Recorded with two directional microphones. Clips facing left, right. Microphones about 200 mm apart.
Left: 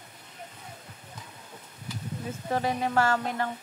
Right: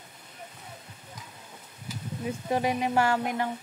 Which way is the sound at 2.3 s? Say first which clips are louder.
Right 2 dB; 15° right (ahead or behind).